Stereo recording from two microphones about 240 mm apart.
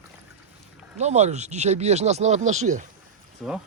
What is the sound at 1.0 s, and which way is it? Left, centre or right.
Speech, right.